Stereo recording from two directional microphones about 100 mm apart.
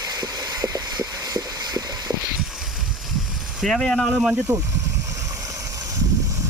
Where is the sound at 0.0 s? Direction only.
35° right (ahead or behind).